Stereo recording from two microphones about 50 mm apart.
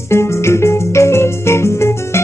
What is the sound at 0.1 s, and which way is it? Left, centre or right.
Music, left.